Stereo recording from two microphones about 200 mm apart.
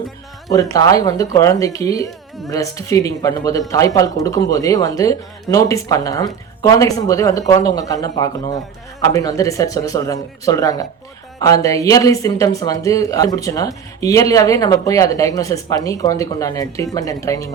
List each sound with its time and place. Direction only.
0.5 s speech: 15° left (ahead or behind)